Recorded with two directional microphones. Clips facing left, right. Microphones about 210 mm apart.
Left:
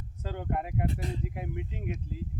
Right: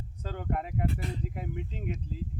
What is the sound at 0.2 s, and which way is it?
Speech, 15° left (ahead or behind).